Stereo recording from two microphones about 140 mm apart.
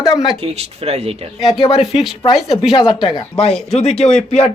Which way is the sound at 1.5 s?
40° left (ahead or behind).